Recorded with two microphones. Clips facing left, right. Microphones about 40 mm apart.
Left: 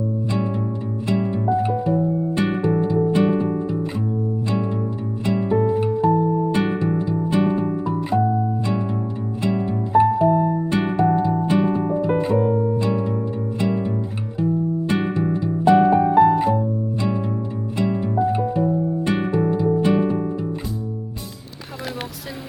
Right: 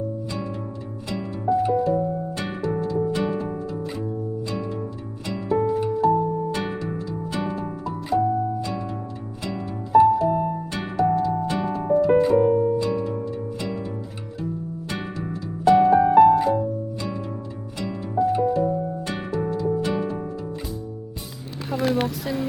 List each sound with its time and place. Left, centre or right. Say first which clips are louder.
1.0 s music: left 4 dB; left
5.2 s music: left 3 dB; left
9.4 s music: left 8 dB; left
13.6 s music: left 7 dB; left
17.7 s music: left 3 dB; left
21.8 s a sound: right 8 dB; centre